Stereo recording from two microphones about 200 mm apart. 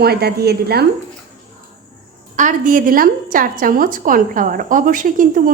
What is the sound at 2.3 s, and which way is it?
A woman's voice, 40° right (ahead or behind).